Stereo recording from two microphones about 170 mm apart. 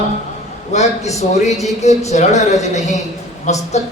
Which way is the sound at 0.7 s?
40° left (ahead or behind).